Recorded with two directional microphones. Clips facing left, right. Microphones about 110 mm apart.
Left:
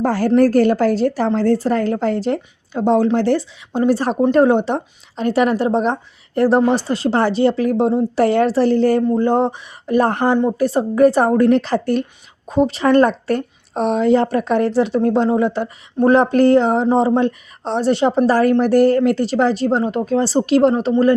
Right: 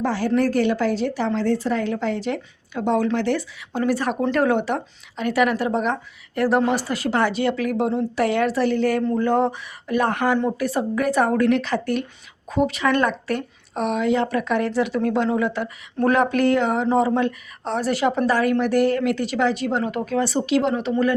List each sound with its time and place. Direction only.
0.0 s a woman's voice: 45° left (ahead or behind)